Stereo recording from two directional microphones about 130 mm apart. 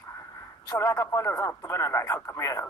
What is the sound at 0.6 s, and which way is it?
Speech, 25° left (ahead or behind).